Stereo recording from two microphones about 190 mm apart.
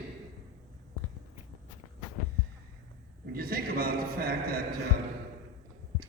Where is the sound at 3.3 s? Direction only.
50° right (ahead or behind).